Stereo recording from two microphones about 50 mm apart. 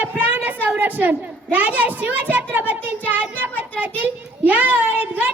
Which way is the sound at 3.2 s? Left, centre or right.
Left.